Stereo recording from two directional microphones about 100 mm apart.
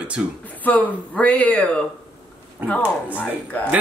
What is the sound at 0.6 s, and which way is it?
Speech, 15° left (ahead or behind).